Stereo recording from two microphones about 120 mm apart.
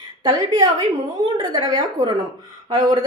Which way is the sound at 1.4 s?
35° right (ahead or behind).